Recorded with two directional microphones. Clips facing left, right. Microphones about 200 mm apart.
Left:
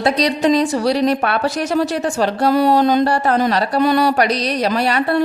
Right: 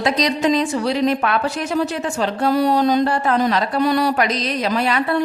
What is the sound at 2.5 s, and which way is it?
Mantra, 60° left (ahead or behind).